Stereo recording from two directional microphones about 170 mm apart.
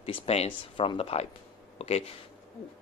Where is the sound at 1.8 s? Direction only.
40° left (ahead or behind).